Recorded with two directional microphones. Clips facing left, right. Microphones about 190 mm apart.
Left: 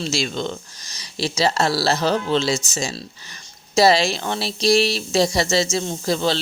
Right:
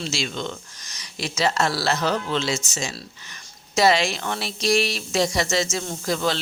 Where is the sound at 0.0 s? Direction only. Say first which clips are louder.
Left 4 dB; 35° left (ahead or behind).